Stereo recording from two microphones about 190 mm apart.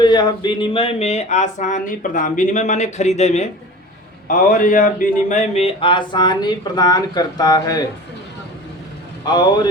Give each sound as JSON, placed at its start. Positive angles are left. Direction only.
{"t": 0.0, "sound": "speech", "side_deg": 25}
{"t": 9.2, "sound": "speech", "side_deg": 20}